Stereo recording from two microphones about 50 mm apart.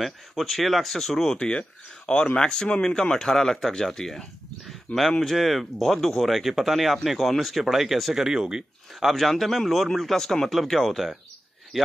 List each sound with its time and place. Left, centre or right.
0.0 s speech: centre
9.1 s speech: centre